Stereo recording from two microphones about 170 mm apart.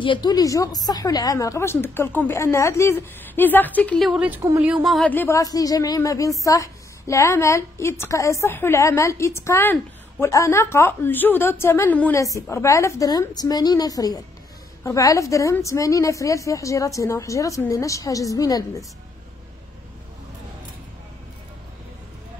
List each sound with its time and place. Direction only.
0.0 s a woman's voice: 25° left (ahead or behind)